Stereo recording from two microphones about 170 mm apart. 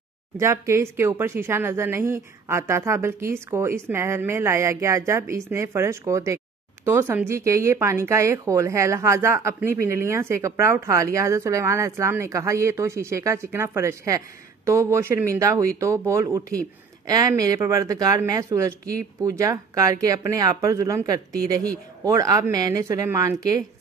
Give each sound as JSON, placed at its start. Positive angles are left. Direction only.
{"t": 0.4, "sound": "speech", "side_deg": -15}